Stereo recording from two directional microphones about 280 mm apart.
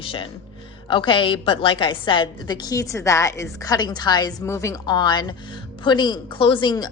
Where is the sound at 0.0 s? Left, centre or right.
Centre.